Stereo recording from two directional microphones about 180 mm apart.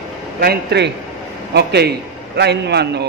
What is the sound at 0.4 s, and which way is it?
A man's voice, 60° right (ahead or behind).